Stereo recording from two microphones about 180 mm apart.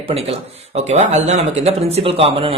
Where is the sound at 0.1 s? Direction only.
35° right (ahead or behind).